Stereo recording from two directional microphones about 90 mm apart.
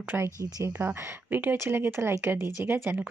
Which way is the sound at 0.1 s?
15° right (ahead or behind).